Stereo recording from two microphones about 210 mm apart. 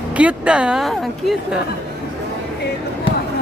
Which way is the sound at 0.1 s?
5° right (ahead or behind).